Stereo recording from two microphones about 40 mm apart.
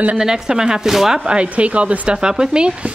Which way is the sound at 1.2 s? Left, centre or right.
Right.